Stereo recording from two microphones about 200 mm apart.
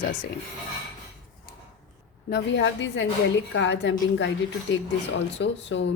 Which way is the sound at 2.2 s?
60° left (ahead or behind).